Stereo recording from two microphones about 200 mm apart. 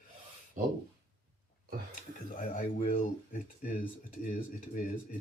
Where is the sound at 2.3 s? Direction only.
40° left (ahead or behind).